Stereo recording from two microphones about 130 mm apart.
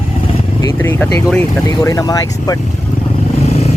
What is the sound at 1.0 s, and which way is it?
Speech, 5° left (ahead or behind).